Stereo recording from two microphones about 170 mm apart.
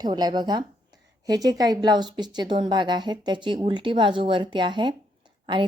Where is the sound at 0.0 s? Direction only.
25° right (ahead or behind).